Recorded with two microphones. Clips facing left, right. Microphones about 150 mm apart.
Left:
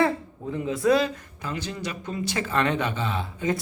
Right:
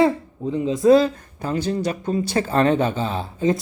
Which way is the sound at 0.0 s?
20° right (ahead or behind).